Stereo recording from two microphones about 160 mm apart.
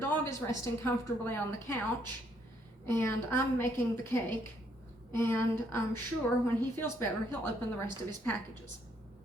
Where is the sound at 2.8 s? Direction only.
15° left (ahead or behind).